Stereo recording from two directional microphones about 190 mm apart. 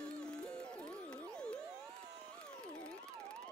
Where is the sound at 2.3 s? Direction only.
5° left (ahead or behind).